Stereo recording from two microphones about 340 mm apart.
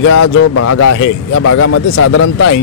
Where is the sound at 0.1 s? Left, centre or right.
Left.